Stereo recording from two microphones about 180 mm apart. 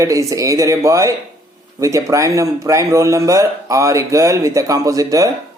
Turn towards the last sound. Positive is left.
turn(degrees=-20)  # may be behind; listen again after turning